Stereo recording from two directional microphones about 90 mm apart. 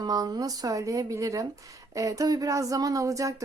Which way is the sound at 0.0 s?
45° right (ahead or behind).